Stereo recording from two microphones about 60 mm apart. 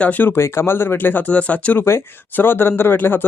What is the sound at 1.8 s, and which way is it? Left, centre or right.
Speech, left.